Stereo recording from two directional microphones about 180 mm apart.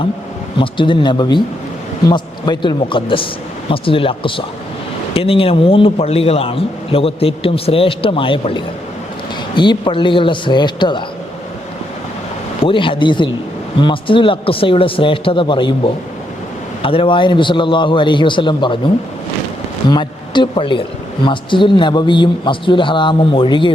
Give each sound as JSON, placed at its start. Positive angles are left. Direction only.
{"t": 0.6, "sound": "a man's voice", "side_deg": 25}
{"t": 12.6, "sound": "a man's voice", "side_deg": 30}
{"t": 19.9, "sound": "a man's voice", "side_deg": 25}